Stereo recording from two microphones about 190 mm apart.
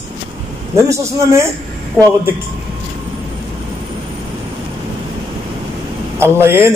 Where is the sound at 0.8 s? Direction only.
15° right (ahead or behind).